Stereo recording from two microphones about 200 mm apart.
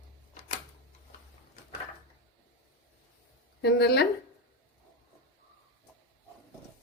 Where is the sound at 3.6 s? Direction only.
55° left (ahead or behind).